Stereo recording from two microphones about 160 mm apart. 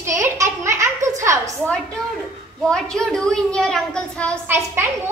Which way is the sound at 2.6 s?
5° left (ahead or behind).